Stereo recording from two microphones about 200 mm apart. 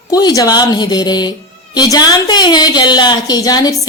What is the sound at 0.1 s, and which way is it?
A woman's voice, 20° left (ahead or behind).